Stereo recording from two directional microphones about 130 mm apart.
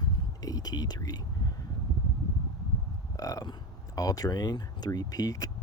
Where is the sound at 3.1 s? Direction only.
25° left (ahead or behind).